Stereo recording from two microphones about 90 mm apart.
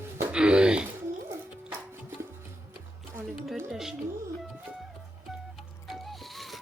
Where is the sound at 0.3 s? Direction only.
10° right (ahead or behind).